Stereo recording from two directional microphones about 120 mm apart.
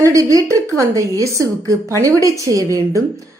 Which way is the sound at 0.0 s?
25° right (ahead or behind).